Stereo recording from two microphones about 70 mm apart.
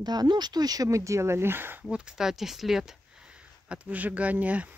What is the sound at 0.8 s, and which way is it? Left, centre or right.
Speech, right.